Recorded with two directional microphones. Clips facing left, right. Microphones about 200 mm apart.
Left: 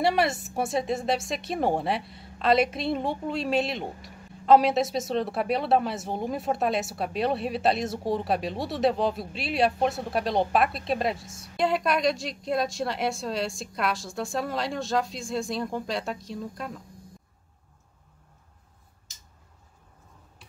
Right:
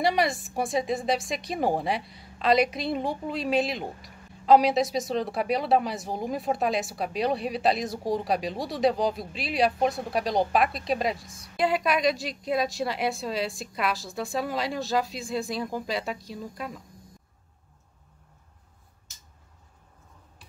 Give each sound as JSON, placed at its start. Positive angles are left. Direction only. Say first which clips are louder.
{"t": 0.0, "sound": "a woman's voice", "louder": "left 1 dB", "side_deg": 0}